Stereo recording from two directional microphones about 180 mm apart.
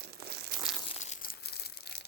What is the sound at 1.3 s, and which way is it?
Crumpling, 65° left (ahead or behind).